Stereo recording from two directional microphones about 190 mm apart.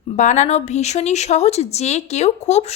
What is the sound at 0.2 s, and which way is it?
Speech, 40° left (ahead or behind).